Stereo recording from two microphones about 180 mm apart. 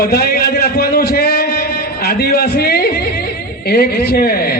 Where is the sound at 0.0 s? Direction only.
60° left (ahead or behind).